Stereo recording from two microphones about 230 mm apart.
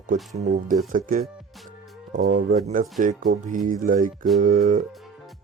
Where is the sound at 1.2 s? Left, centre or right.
Centre.